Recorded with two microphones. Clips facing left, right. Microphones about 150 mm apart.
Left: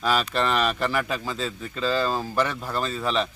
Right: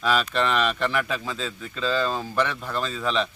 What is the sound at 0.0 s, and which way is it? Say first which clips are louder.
A man's voice: even; centre (ahead or behind).